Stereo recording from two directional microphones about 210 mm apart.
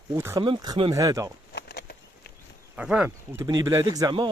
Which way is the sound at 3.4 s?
15° right (ahead or behind).